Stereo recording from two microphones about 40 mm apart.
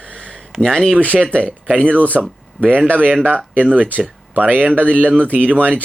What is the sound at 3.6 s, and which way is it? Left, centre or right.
Speech, right.